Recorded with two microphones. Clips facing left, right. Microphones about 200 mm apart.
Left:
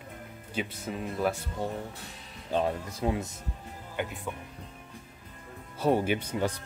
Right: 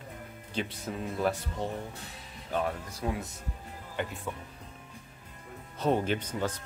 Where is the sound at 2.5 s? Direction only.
20° left (ahead or behind).